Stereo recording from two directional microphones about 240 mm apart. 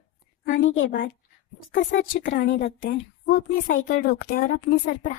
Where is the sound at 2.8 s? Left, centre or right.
Left.